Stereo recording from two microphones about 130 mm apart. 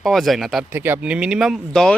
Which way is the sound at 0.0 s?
Centre (ahead or behind).